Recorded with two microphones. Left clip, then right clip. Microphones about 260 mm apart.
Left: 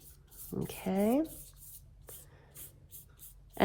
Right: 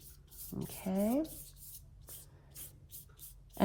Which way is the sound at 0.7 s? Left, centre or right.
Right.